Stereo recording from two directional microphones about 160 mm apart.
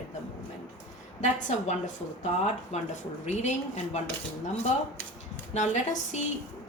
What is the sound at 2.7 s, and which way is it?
Speech, 45° left (ahead or behind).